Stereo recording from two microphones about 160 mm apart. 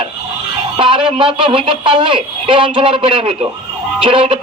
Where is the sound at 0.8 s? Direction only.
35° right (ahead or behind).